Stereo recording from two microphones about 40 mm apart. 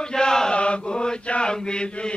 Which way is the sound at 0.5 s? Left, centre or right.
Left.